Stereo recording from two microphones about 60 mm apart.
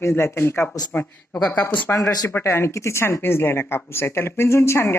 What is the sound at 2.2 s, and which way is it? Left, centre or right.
Speech, left.